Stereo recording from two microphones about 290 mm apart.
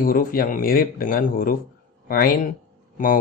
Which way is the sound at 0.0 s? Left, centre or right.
Left.